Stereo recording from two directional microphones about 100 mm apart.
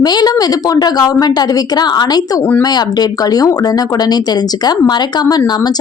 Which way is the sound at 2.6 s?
40° left (ahead or behind).